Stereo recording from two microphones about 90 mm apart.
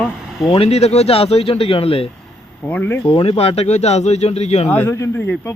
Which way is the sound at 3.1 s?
80° left.